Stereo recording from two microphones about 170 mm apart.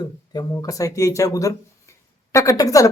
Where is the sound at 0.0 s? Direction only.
25° left (ahead or behind).